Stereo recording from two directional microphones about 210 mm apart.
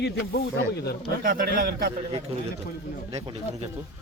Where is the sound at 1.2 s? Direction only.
45° right (ahead or behind).